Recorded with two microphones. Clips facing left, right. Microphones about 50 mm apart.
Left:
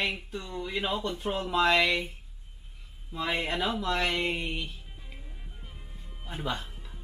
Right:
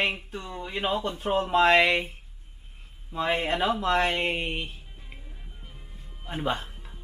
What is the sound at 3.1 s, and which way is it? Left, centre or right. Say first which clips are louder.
Speech: right 4 dB; right.